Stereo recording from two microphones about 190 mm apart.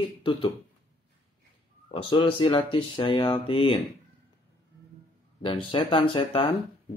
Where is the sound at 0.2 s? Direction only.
25° left (ahead or behind).